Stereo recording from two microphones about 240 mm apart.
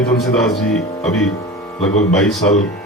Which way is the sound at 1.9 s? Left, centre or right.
Left.